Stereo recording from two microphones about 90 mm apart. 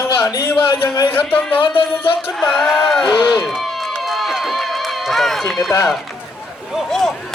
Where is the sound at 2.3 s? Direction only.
5° left (ahead or behind).